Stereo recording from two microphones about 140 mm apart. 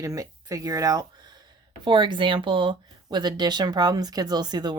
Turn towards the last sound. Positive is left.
turn(degrees=-30)  # may be behind; listen again after turning